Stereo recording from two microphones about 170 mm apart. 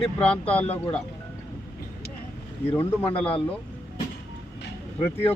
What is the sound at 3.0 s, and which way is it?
Speech, 35° left (ahead or behind).